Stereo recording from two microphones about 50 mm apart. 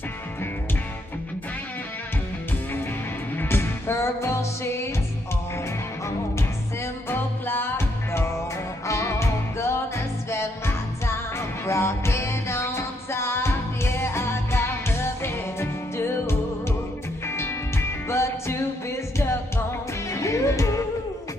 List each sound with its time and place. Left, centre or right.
3.3 s music: left
6.0 s music: left
7.2 s music: left
7.7 s music: left
8.8 s music: left
12.5 s music: left
20.1 s music: left